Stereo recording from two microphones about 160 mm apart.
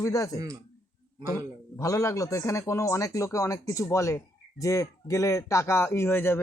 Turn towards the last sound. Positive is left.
turn(degrees=15)  # may be behind; listen again after turning